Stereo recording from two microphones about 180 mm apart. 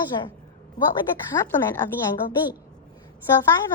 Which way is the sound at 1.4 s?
15° left (ahead or behind).